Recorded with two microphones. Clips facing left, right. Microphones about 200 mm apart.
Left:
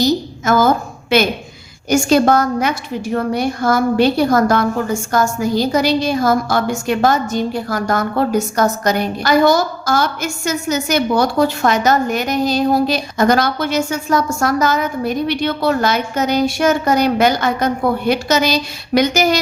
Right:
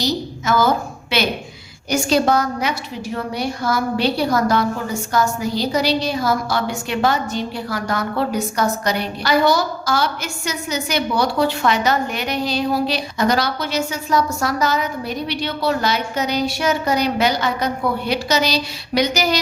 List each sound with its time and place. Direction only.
0.0 s a woman's voice: 50° left (ahead or behind)